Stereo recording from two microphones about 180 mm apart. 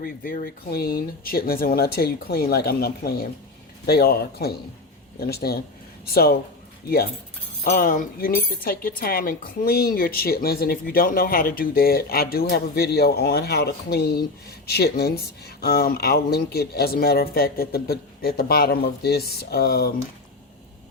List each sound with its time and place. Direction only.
0.0 s speech: 55° left (ahead or behind)
7.6 s speech: 50° left (ahead or behind)